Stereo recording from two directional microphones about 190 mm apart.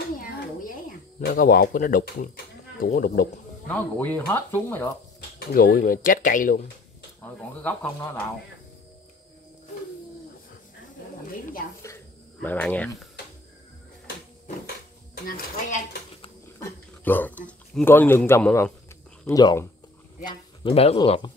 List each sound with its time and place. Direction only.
1.2 s speech: 50° left (ahead or behind)
3.6 s speech: 10° left (ahead or behind)
5.5 s speech: 50° left (ahead or behind)
11.2 s speech: 45° left (ahead or behind)
12.4 s speech: 5° left (ahead or behind)
15.2 s speech: 50° left (ahead or behind)
16.5 s speech: 10° left (ahead or behind)
20.2 s speech: 30° left (ahead or behind)